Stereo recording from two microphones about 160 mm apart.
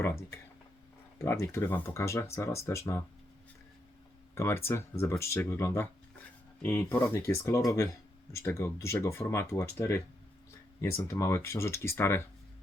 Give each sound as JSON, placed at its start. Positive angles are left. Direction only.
{"t": 0.0, "sound": "speech", "side_deg": 15}
{"t": 4.4, "sound": "speech", "side_deg": 15}